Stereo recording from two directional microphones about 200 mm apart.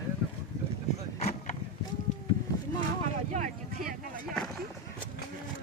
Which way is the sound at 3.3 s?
40° right (ahead or behind).